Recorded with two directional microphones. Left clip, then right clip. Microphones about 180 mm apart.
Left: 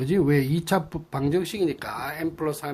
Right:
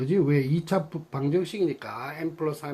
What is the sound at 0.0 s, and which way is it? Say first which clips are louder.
Speech: left 2 dB; 30° left (ahead or behind).